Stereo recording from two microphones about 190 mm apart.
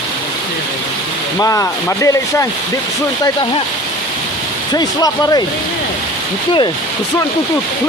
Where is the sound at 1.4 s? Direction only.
15° left (ahead or behind).